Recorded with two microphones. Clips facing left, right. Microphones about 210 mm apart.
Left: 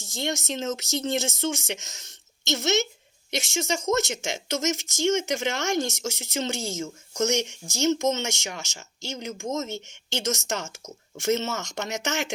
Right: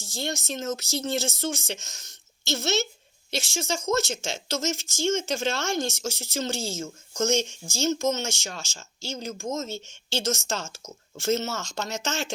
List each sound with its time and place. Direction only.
0.0 s speech: 20° left (ahead or behind)